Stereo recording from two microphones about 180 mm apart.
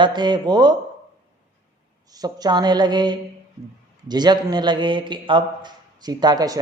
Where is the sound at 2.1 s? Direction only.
20° right (ahead or behind).